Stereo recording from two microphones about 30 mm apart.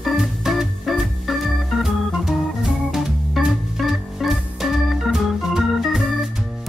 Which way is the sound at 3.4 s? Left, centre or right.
Centre.